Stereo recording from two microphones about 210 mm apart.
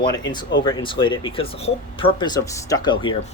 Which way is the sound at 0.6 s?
25° left (ahead or behind).